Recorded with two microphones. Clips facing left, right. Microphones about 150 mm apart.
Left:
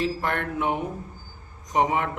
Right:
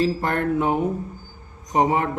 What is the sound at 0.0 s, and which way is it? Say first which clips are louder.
A man's voice: right 5 dB; 35° right (ahead or behind).